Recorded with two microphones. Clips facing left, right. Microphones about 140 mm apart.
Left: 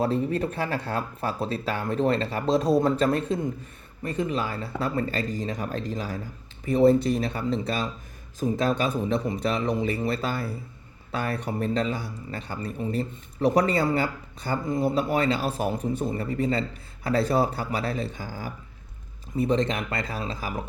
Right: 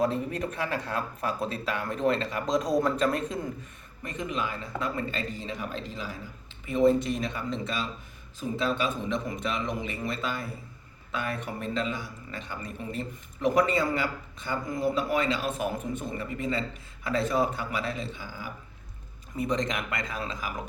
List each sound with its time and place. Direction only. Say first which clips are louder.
0.0 s speech: left 3 dB; 30° left (ahead or behind)